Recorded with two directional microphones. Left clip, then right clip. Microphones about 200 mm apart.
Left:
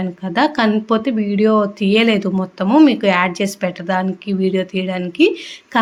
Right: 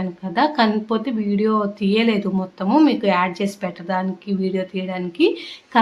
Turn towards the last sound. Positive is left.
turn(degrees=25)  # may be behind; listen again after turning